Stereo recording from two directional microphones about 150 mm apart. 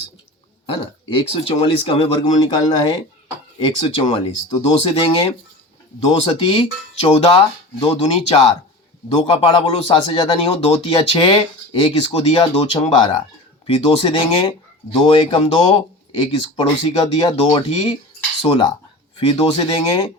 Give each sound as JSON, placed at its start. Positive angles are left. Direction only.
{"t": 0.7, "sound": "a man's voice", "side_deg": 35}
{"t": 3.8, "sound": "a man's voice", "side_deg": 35}